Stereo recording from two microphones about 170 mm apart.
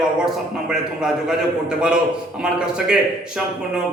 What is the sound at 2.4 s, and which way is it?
A man's voice, 5° right (ahead or behind).